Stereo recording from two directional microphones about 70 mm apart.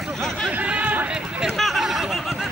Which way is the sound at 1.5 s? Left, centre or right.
Centre.